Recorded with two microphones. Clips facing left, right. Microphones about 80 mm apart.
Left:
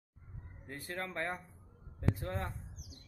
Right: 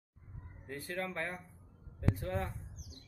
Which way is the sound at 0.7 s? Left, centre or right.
Left.